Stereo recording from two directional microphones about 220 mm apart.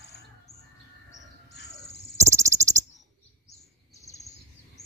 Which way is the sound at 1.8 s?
30° left (ahead or behind).